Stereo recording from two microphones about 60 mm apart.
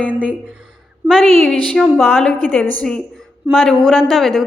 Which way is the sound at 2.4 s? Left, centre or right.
Left.